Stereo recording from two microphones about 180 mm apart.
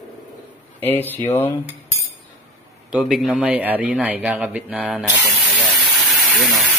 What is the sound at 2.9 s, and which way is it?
A man's voice, centre (ahead or behind).